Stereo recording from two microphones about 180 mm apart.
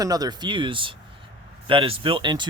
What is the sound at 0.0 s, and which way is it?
Speech, 20° right (ahead or behind).